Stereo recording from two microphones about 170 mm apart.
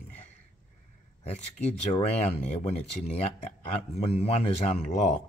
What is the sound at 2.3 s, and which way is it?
Speech, 40° left (ahead or behind).